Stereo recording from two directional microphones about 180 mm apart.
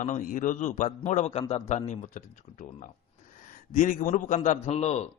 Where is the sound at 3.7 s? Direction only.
45° left (ahead or behind).